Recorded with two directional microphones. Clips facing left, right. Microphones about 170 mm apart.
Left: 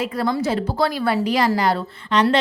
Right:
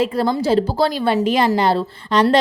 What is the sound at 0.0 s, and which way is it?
A woman's voice, 30° right (ahead or behind).